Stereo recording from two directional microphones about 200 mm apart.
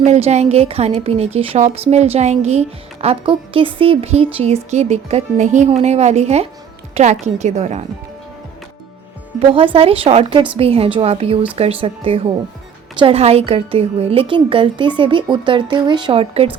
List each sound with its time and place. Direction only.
0.0 s a woman's voice: 35° right (ahead or behind)
9.5 s a woman's voice: 25° right (ahead or behind)